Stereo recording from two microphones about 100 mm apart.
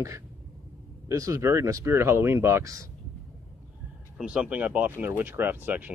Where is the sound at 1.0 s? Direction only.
35° right (ahead or behind).